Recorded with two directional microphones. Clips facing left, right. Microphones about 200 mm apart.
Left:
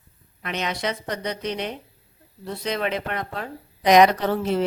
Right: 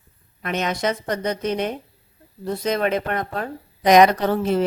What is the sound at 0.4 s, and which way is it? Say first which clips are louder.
Speech: right 4 dB; 45° right (ahead or behind).